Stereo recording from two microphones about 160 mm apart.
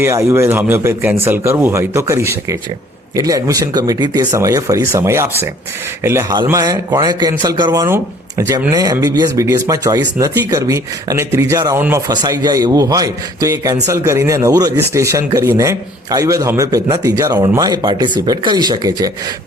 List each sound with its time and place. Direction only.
0.0 s speech: 15° right (ahead or behind)